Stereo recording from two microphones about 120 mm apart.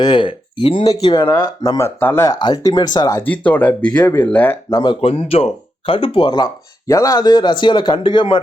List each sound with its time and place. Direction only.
0.0 s speech: 45° left (ahead or behind)
2.0 s speech: 20° left (ahead or behind)
2.3 s speech: 35° left (ahead or behind)
3.2 s speech: 10° left (ahead or behind)
4.7 s speech: 40° left (ahead or behind)